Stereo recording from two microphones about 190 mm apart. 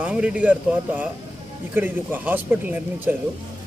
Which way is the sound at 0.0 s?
5° right (ahead or behind).